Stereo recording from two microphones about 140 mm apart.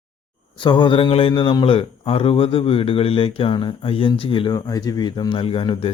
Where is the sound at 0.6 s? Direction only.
35° left (ahead or behind).